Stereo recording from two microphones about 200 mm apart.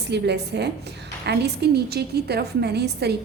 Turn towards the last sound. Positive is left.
turn(degrees=-55)  # may be behind; listen again after turning